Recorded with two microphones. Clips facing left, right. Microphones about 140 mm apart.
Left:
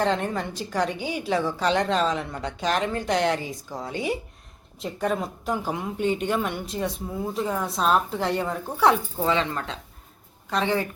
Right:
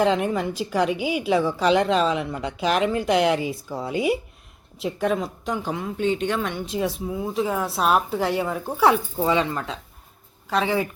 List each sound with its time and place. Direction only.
0.0 s a woman's voice: 10° right (ahead or behind); by 6.6 s 10° left (ahead or behind)
6.7 s a woman's voice: centre (ahead or behind)